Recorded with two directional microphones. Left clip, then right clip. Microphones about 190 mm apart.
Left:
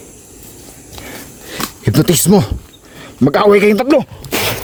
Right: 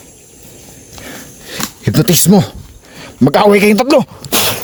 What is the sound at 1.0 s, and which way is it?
Biting, 10° right (ahead or behind).